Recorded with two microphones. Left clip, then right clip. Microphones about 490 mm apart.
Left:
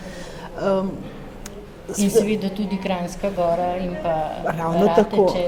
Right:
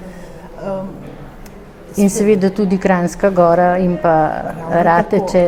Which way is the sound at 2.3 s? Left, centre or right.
Right.